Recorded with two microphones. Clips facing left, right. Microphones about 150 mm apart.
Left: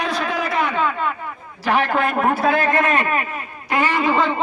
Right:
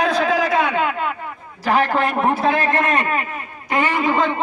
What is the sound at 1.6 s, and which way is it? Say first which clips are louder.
Speech: right 1 dB; 40° right (ahead or behind).